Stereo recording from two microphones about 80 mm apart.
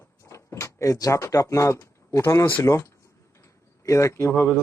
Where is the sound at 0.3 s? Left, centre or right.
Left.